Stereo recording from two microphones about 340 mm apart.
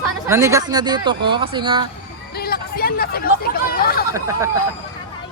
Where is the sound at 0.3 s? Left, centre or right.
Centre.